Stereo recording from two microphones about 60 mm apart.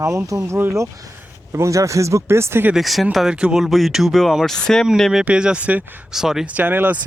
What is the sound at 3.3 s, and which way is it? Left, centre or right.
Speech, centre.